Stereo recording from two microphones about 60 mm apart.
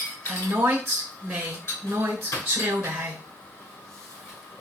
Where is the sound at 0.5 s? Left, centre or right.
Right.